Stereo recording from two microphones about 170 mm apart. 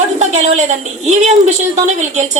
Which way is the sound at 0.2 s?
45° right (ahead or behind).